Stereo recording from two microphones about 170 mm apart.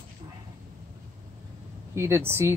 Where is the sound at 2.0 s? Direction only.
15° right (ahead or behind).